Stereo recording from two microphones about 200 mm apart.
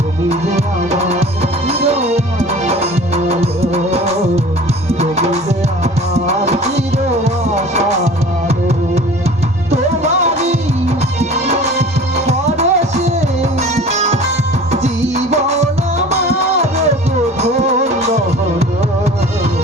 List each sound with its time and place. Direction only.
0.3 s music: 35° right (ahead or behind)
9.7 s music: 35° right (ahead or behind)